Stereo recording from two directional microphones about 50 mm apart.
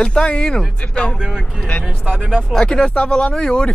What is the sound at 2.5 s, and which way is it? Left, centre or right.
Speech, centre.